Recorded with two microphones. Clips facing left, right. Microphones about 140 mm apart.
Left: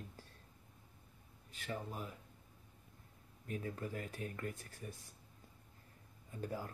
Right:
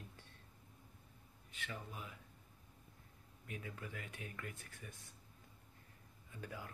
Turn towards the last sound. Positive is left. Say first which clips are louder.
# left 7 dB
turn(degrees=35)  # may be behind; listen again after turning